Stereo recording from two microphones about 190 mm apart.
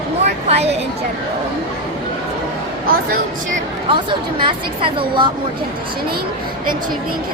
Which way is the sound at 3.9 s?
25° right (ahead or behind).